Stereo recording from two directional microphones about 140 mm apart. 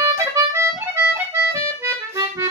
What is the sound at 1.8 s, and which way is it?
Accordion, 20° right (ahead or behind).